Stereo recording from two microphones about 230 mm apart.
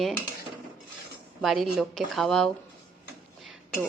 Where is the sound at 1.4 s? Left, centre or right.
Centre.